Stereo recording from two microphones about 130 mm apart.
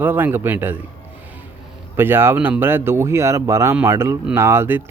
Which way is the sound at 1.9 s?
15° right (ahead or behind).